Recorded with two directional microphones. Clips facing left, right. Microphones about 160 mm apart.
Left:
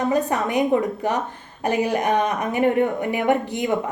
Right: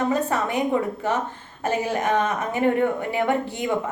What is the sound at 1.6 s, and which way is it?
A woman's voice, 15° left (ahead or behind).